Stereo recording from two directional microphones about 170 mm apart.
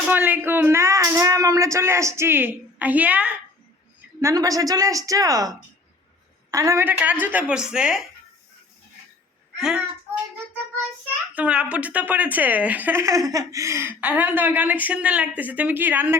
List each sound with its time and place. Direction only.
0.1 s speech: 10° right (ahead or behind)
4.2 s a woman's voice: 20° right (ahead or behind)
9.6 s a child's voice: 5° right (ahead or behind)
11.3 s speech: 5° right (ahead or behind)